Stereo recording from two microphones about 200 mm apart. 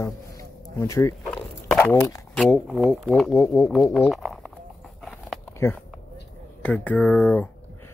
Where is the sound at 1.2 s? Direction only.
5° left (ahead or behind).